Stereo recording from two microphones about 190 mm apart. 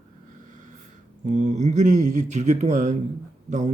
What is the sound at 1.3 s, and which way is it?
A man's voice, 40° right (ahead or behind).